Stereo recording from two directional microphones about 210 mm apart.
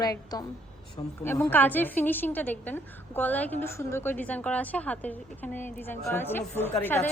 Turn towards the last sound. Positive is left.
turn(degrees=10)  # may be behind; listen again after turning